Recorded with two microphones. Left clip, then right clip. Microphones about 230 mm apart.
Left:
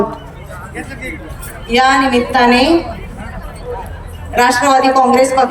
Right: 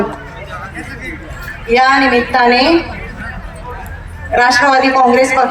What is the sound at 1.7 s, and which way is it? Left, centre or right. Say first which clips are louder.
A man's voice: right 1 dB; centre.